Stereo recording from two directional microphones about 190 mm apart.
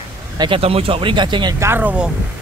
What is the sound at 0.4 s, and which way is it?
Speech, 30° right (ahead or behind).